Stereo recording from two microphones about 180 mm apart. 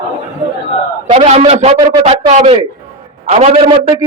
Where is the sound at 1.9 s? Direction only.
20° right (ahead or behind).